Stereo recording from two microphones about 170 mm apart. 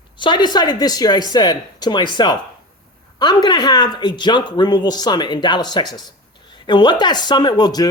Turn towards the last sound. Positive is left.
turn(degrees=25)  # may be behind; listen again after turning